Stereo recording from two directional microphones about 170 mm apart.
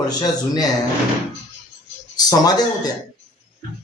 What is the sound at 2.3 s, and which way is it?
Speech, 20° left (ahead or behind).